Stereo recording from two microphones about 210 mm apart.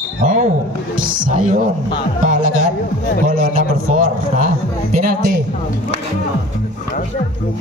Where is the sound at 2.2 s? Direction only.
40° right (ahead or behind).